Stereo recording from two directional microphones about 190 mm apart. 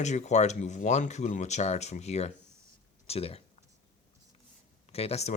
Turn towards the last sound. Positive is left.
turn(degrees=35)  # may be behind; listen again after turning